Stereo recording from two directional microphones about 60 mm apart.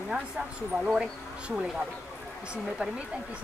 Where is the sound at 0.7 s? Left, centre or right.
Centre.